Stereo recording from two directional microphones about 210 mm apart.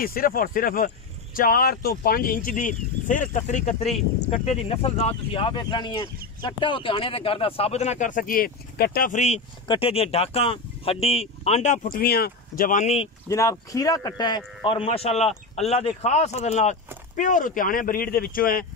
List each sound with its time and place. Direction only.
0.0 s speech: 45° left (ahead or behind)
13.3 s speech: 15° left (ahead or behind); by 18.7 s 40° left (ahead or behind)